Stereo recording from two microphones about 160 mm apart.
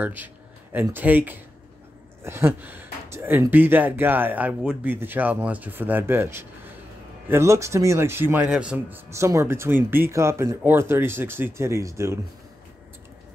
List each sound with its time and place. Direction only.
0.0 s speech: 10° right (ahead or behind)